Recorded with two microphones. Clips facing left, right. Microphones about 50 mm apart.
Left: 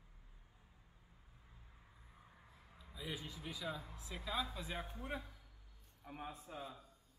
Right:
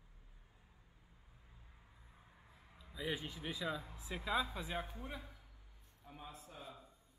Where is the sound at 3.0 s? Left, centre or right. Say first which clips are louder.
Right 5 dB; right.